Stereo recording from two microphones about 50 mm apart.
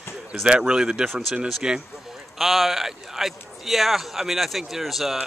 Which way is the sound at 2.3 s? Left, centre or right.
Centre.